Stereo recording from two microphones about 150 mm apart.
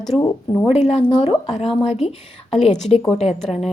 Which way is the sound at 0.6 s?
45° left (ahead or behind).